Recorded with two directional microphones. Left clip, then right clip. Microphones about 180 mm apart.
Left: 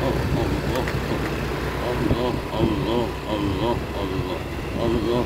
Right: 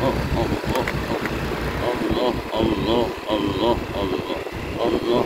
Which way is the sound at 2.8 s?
15° right (ahead or behind).